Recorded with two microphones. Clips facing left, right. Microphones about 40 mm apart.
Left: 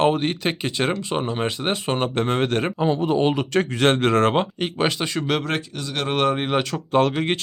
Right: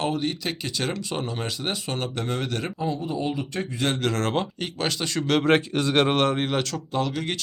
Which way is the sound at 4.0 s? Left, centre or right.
Left.